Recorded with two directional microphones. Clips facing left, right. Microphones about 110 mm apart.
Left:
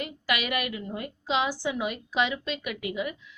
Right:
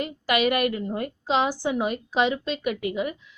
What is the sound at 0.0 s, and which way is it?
A woman's voice, 35° right (ahead or behind).